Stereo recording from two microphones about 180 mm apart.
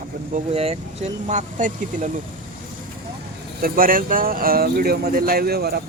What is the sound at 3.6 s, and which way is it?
Speech, 50° right (ahead or behind).